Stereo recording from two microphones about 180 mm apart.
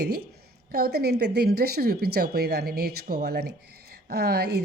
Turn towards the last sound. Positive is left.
turn(degrees=-65)  # may be behind; listen again after turning